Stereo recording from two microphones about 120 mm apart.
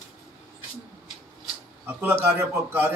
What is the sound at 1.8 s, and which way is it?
A man's voice, 15° right (ahead or behind).